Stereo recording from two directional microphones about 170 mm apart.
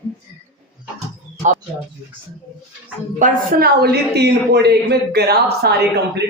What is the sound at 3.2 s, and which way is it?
A man's voice, 65° right (ahead or behind).